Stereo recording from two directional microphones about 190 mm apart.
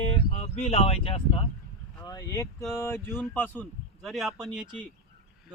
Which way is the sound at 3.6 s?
Centre (ahead or behind).